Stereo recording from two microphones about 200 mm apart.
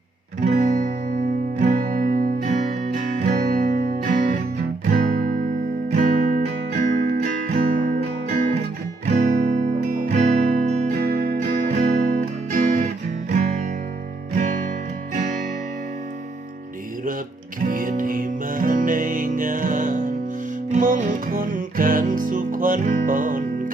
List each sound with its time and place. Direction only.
0.3 s guitar: 40° right (ahead or behind)
1.5 s music: 45° right (ahead or behind)
14.3 s music: 40° right (ahead or behind)
17.7 s music: 45° right (ahead or behind)